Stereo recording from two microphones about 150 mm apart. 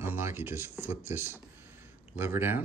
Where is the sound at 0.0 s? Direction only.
15° right (ahead or behind).